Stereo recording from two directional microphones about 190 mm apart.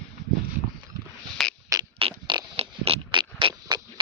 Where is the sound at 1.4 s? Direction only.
Centre (ahead or behind).